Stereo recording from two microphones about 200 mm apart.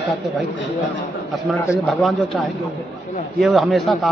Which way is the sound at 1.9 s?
Centre (ahead or behind).